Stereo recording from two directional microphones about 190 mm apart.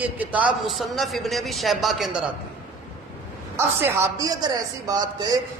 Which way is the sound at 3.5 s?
15° right (ahead or behind).